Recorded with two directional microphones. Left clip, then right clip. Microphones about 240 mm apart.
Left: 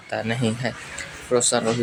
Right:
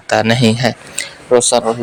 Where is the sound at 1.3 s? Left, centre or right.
Right.